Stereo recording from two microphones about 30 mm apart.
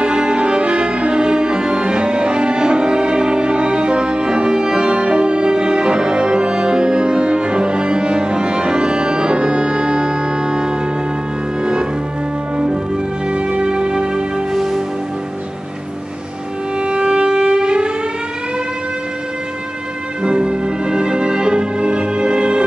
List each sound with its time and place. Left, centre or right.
0.0 s music: right
11.6 s cello: right
13.3 s music: right
14.5 s music: centre
16.8 s music: right
20.2 s music: right